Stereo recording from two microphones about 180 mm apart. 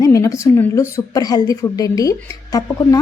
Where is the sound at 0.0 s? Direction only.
15° left (ahead or behind).